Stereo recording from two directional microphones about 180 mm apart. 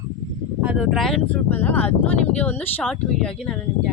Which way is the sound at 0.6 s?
5° right (ahead or behind).